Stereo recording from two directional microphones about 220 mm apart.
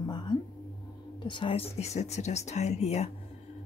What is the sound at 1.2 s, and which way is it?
Speech, 20° left (ahead or behind).